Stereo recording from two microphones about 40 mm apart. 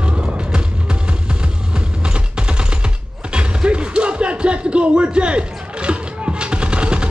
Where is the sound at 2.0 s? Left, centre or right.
Right.